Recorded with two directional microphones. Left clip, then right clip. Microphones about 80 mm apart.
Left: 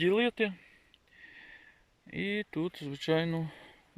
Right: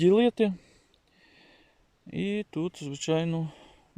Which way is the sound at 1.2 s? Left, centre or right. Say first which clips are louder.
Left 6 dB; right.